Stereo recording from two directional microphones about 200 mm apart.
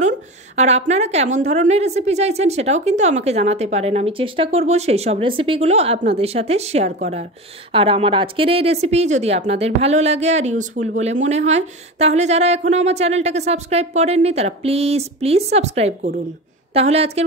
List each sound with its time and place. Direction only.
0.6 s speech: 35° right (ahead or behind)